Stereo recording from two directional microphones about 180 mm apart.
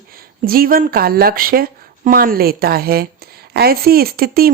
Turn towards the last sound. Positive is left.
turn(degrees=-55)  # may be behind; listen again after turning